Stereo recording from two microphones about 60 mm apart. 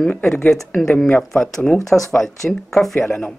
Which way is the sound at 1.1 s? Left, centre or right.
Centre.